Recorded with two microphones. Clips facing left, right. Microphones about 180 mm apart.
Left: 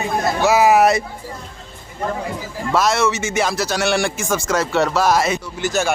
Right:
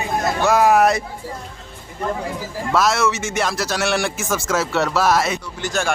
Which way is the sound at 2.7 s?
Centre (ahead or behind).